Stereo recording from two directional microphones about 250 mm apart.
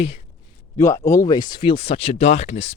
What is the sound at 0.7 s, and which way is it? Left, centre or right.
A man's voice, centre.